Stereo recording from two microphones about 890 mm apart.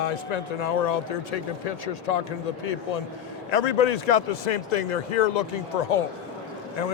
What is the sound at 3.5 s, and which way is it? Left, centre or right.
A man's voice, left.